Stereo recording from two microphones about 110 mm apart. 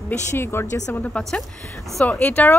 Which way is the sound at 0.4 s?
20° left (ahead or behind).